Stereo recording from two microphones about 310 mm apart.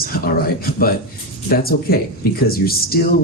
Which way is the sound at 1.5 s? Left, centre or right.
Left.